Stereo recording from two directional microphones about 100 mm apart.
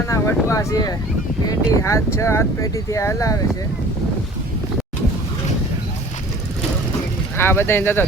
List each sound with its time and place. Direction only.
0.1 s speech: 30° left (ahead or behind)
7.3 s speech: 25° left (ahead or behind)